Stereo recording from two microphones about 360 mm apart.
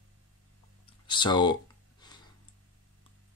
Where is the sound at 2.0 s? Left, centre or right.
Centre.